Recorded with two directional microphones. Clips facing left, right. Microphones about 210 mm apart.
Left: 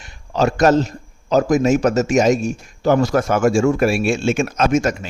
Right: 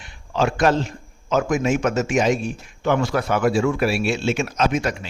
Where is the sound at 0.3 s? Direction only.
40° left (ahead or behind).